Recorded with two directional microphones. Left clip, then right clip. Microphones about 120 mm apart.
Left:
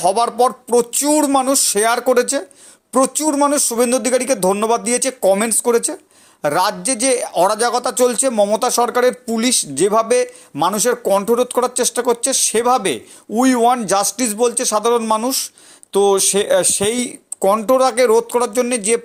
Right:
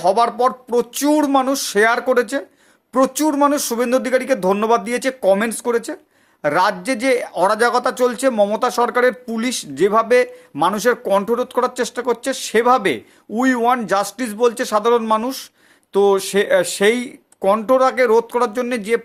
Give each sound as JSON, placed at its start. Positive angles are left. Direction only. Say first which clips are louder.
{"t": 0.0, "sound": "speech", "louder": "left 1 dB", "side_deg": 25}